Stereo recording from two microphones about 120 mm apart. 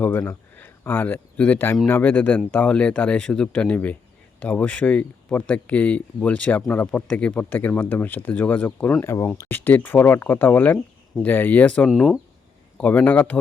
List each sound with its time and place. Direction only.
0.0 s speech: 20° left (ahead or behind); by 12.2 s centre (ahead or behind)
12.7 s speech: 15° left (ahead or behind)